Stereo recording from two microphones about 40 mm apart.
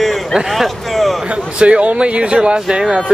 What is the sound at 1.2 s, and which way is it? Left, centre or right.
Speech, right.